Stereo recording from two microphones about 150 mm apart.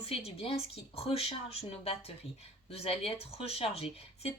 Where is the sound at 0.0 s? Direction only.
40° left (ahead or behind).